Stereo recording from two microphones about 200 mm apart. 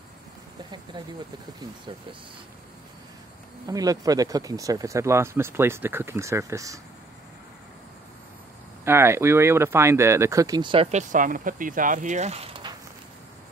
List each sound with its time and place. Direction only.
0.9 s speech: 25° right (ahead or behind)
3.6 s speech: 20° right (ahead or behind)
8.8 s speech: 10° right (ahead or behind); by 12.7 s 25° right (ahead or behind)